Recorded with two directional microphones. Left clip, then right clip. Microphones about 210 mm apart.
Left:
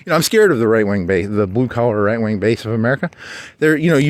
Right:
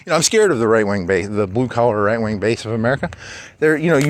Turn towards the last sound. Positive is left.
turn(degrees=50)  # may be behind; listen again after turning